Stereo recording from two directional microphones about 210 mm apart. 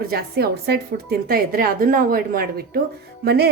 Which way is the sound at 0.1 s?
50° right (ahead or behind).